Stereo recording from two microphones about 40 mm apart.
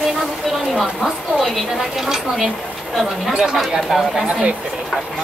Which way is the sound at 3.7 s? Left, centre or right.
Centre.